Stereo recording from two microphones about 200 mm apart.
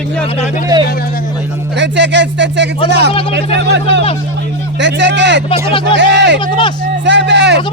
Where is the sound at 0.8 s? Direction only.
50° left (ahead or behind).